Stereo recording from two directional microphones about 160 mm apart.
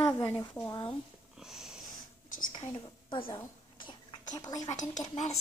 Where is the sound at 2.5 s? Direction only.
30° left (ahead or behind).